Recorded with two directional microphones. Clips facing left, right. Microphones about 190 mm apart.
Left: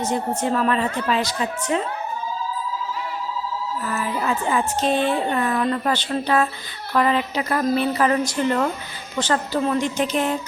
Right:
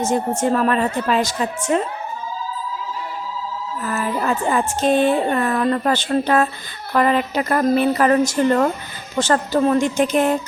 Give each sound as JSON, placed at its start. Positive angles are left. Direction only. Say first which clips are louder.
{"t": 0.0, "sound": "a woman's voice", "louder": "right 4 dB", "side_deg": -45}
{"t": 3.8, "sound": "a woman's voice", "louder": "right 4 dB", "side_deg": -50}